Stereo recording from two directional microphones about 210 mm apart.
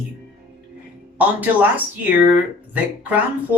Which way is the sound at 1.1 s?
10° right (ahead or behind).